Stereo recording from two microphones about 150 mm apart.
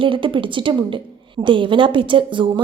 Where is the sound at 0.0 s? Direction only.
35° right (ahead or behind).